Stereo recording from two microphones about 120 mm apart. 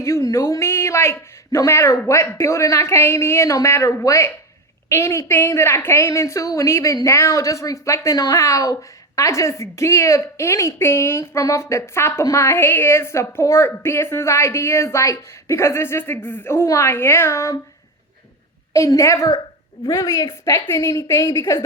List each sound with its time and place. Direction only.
0.0 s a woman's voice: 25° left (ahead or behind)
18.7 s a woman's voice: 25° left (ahead or behind)